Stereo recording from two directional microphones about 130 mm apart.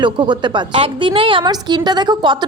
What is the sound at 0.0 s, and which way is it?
A woman's voice, 35° right (ahead or behind).